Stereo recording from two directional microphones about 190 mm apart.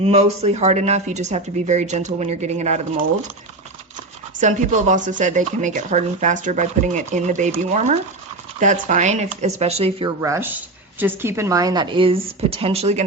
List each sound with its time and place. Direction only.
0.0 s speech: 35° right (ahead or behind)
4.4 s speech: 40° right (ahead or behind)
10.2 s speech: 15° right (ahead or behind); by 13.1 s 35° right (ahead or behind)